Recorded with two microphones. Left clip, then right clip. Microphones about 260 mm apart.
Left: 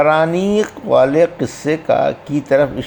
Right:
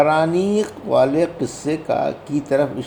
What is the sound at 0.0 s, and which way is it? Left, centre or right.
Speech, left.